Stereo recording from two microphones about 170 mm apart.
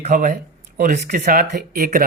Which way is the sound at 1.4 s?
70° right (ahead or behind).